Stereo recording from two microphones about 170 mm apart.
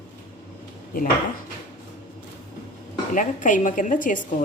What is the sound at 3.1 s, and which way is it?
A woman's voice, 50° left (ahead or behind).